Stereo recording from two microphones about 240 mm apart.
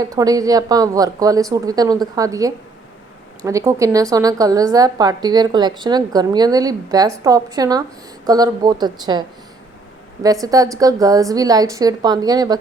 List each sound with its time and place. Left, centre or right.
0.0 s speech: centre
10.4 s speech: centre